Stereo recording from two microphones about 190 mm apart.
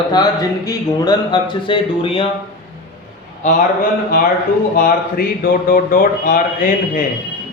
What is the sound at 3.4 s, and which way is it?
A man's voice, 45° left (ahead or behind).